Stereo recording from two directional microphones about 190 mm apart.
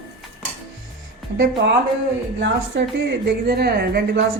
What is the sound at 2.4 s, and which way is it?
A woman's voice, 70° right (ahead or behind).